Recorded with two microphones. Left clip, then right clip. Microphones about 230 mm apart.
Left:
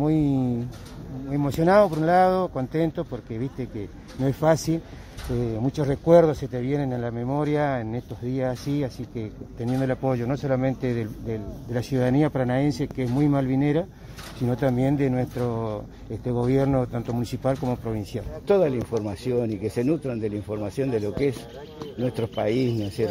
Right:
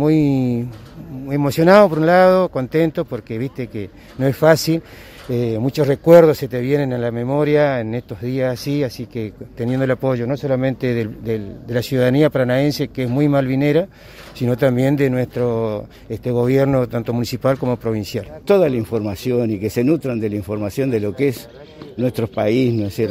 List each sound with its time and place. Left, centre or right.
0.0 s speech: right